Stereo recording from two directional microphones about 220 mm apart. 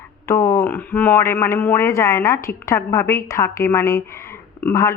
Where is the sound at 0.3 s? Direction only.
10° left (ahead or behind).